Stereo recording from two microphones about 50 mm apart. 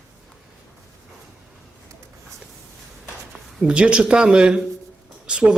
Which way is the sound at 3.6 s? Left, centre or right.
Right.